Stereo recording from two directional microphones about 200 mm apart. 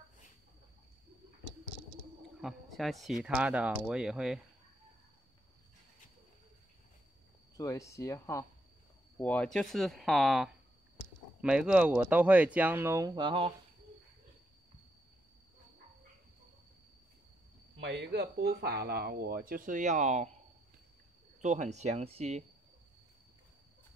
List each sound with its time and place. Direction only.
2.4 s speech: centre (ahead or behind)
7.5 s speech: 15° left (ahead or behind); by 13.5 s 25° right (ahead or behind)
17.7 s speech: 60° right (ahead or behind); by 20.2 s 35° right (ahead or behind)
21.4 s speech: 35° right (ahead or behind)